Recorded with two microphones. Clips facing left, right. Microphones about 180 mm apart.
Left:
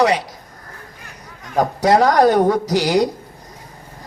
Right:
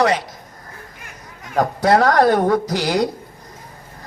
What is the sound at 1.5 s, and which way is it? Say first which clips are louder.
Speech: left 1 dB; 15° left (ahead or behind).